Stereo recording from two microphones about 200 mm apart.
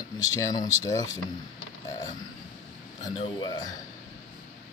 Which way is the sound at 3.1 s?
25° left (ahead or behind).